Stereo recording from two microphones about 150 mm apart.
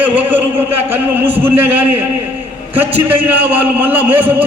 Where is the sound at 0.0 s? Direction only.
10° right (ahead or behind).